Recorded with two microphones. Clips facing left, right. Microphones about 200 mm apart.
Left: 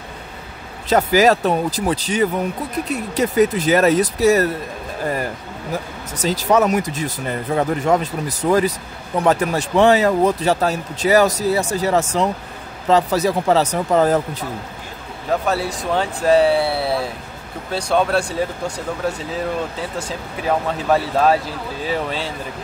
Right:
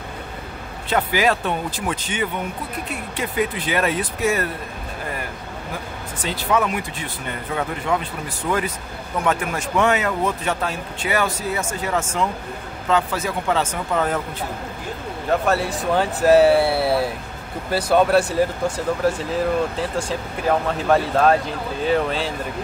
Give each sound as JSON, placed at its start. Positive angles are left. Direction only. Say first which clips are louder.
{"t": 0.8, "sound": "speech", "louder": "left 6 dB", "side_deg": 40}
{"t": 6.1, "sound": "speech", "louder": "left 5 dB", "side_deg": 40}
{"t": 15.2, "sound": "speech", "louder": "even", "side_deg": 0}
{"t": 19.8, "sound": "speech", "louder": "right 2 dB", "side_deg": 0}